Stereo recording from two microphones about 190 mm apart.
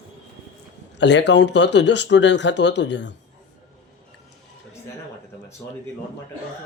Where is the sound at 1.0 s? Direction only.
65° left (ahead or behind).